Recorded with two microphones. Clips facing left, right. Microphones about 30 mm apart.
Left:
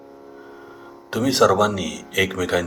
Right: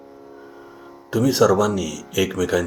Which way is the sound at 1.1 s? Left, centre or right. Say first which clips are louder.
Even; left.